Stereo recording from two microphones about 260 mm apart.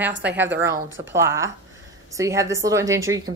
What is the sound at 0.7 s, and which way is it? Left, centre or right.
Speech, right.